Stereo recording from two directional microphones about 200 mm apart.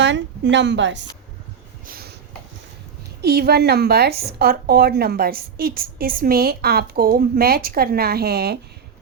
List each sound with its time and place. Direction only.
0.0 s a woman's voice: 65° right (ahead or behind)
1.9 s a sound: 50° right (ahead or behind)
3.2 s a woman's voice: 50° right (ahead or behind)